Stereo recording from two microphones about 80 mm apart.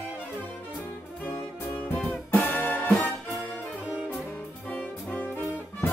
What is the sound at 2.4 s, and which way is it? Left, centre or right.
Music, left.